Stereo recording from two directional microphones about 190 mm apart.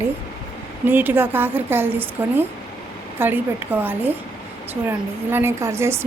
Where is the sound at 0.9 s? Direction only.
10° right (ahead or behind).